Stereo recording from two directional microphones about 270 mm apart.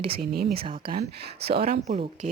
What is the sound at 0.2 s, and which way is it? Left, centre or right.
Speech, right.